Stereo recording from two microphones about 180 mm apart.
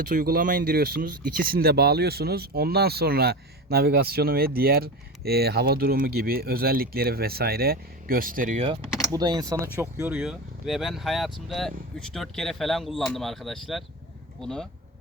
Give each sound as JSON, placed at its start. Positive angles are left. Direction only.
{"t": 0.0, "sound": "speech", "side_deg": -50}
{"t": 9.1, "sound": "speech", "side_deg": -20}